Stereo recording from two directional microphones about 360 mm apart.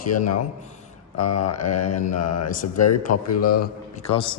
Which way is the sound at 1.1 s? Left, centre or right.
Left.